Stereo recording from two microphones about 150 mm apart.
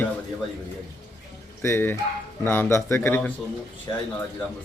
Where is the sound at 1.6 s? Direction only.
15° left (ahead or behind).